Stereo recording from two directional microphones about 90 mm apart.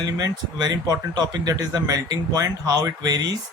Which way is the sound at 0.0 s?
45° right (ahead or behind).